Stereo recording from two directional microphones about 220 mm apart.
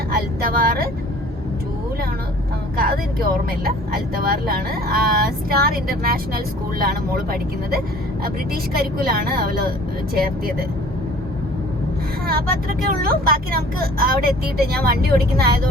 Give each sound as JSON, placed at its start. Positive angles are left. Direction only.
{"t": 0.1, "sound": "speech", "side_deg": -40}
{"t": 2.7, "sound": "speech", "side_deg": -40}
{"t": 12.3, "sound": "speech", "side_deg": -40}